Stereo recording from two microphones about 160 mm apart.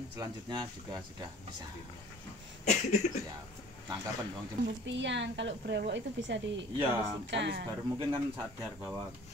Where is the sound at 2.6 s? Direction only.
45° left (ahead or behind).